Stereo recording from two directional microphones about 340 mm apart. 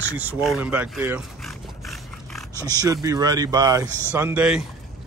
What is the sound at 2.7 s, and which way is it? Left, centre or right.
Speech, centre.